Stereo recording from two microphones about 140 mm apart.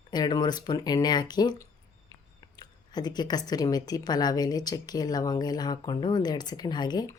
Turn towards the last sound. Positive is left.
turn(degrees=30)  # may be behind; listen again after turning